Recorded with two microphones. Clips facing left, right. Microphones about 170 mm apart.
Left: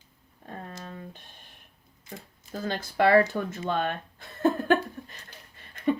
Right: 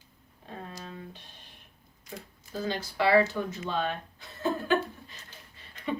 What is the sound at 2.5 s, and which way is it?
Speech, 55° left (ahead or behind).